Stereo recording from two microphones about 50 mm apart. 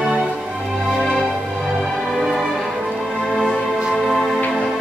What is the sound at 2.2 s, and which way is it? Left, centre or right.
Music, centre.